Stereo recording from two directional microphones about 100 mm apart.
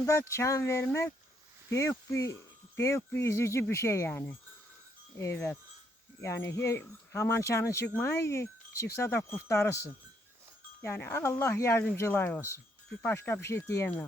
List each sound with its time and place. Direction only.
0.0 s speech: 30° left (ahead or behind)